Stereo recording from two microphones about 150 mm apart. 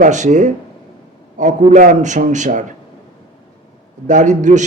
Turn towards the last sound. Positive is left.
turn(degrees=-55)  # may be behind; listen again after turning